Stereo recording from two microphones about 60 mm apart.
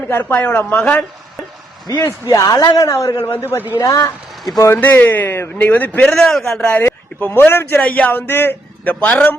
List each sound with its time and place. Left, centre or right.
0.1 s a man's voice: left
2.2 s a man's voice: left
2.9 s a man's voice: left
3.2 s a man's voice: left
3.8 s speech: left
4.8 s a man's voice: left
6.1 s a man's voice: centre
6.7 s speech: left
7.8 s a man's voice: left